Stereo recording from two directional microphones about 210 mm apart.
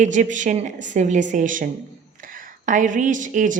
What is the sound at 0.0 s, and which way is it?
A woman's voice, 35° right (ahead or behind).